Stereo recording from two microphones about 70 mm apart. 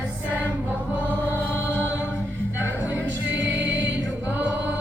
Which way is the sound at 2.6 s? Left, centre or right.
Right.